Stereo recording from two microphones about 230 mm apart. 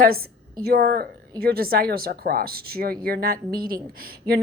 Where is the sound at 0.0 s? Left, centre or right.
Right.